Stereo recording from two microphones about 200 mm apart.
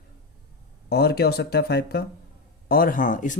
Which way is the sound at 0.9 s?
50° left (ahead or behind).